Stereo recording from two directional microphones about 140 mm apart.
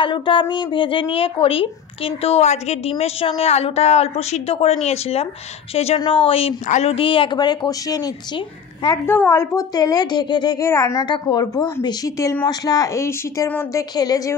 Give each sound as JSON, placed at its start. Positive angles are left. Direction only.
{"t": 0.0, "sound": "speech", "side_deg": 35}
{"t": 9.0, "sound": "speech", "side_deg": 15}